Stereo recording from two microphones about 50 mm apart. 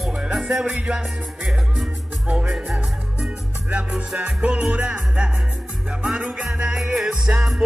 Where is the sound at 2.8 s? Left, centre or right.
Right.